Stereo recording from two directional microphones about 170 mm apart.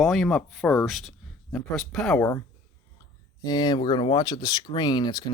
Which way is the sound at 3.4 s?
25° left (ahead or behind).